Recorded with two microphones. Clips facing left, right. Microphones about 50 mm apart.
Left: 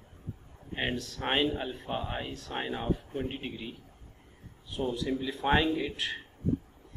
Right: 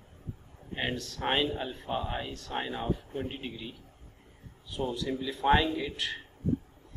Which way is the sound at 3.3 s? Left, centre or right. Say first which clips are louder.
Left 1 dB; centre.